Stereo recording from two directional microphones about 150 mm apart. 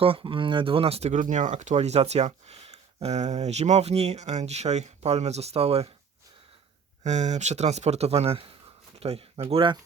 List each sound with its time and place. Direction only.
0.0 s speech: 35° right (ahead or behind)
7.0 s speech: 50° right (ahead or behind)